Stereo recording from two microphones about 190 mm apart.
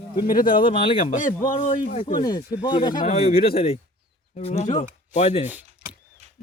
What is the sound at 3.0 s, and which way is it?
Speech, 35° left (ahead or behind).